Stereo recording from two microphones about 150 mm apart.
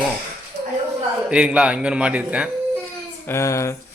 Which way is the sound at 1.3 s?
5° right (ahead or behind).